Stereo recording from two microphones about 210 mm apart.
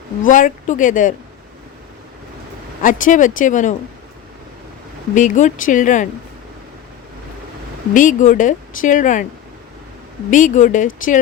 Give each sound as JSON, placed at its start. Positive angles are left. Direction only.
{"t": 0.3, "sound": "a woman's voice", "side_deg": 40}
{"t": 2.8, "sound": "a woman's voice", "side_deg": 40}
{"t": 5.1, "sound": "a woman's voice", "side_deg": 35}
{"t": 7.9, "sound": "a woman's voice", "side_deg": 40}
{"t": 10.3, "sound": "a woman's voice", "side_deg": 40}